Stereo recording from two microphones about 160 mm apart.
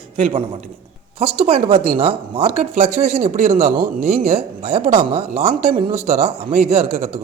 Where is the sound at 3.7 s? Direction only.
65° right (ahead or behind).